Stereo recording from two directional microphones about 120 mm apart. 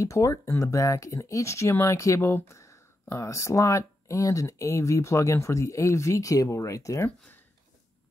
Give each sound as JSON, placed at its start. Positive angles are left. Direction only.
{"t": 0.0, "sound": "speech", "side_deg": 25}